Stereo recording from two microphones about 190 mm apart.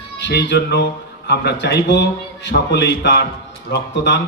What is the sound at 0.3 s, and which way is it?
Speech, 60° left (ahead or behind).